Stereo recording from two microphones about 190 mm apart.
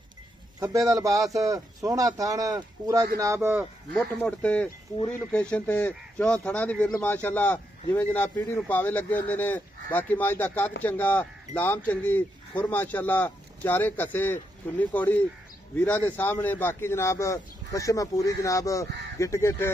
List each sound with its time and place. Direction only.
0.6 s speech: 15° right (ahead or behind)
3.9 s speech: 5° left (ahead or behind)